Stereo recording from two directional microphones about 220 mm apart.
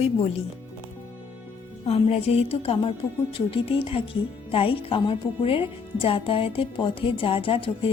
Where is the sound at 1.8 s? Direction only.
30° left (ahead or behind).